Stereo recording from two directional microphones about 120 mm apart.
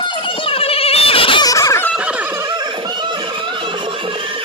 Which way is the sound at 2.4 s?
35° right (ahead or behind).